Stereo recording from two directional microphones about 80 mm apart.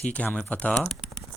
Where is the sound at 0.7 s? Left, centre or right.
Centre.